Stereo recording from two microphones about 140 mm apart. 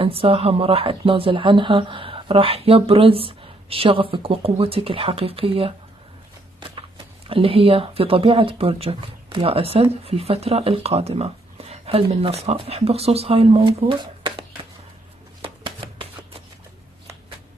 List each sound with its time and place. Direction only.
0.0 s speech: 40° right (ahead or behind)
7.2 s speech: 40° right (ahead or behind)
15.4 s shuffling cards: 40° right (ahead or behind)